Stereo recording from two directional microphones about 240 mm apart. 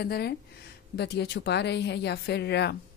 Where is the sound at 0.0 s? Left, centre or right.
Left.